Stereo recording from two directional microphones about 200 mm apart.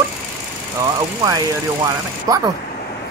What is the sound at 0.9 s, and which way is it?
Speech, 20° right (ahead or behind).